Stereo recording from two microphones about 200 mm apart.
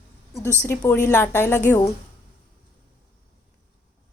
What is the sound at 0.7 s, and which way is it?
A woman's voice, 15° left (ahead or behind).